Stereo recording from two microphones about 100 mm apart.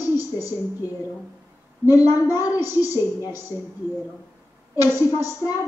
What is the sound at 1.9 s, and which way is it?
A woman's voice, 35° left (ahead or behind).